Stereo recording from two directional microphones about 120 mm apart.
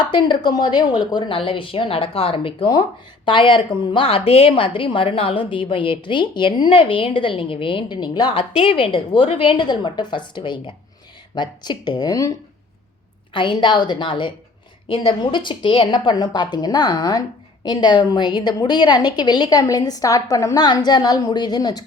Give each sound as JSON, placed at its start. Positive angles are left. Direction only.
{"t": 0.0, "sound": "a woman's voice", "side_deg": 40}
{"t": 8.4, "sound": "a woman's voice", "side_deg": 50}
{"t": 13.3, "sound": "a woman's voice", "side_deg": 45}